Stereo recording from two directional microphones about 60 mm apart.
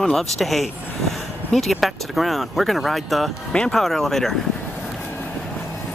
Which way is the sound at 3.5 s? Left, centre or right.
Centre.